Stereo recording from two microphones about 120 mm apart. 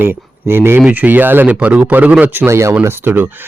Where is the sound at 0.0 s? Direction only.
20° right (ahead or behind).